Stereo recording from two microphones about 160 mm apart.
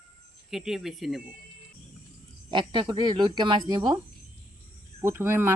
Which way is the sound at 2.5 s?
30° right (ahead or behind).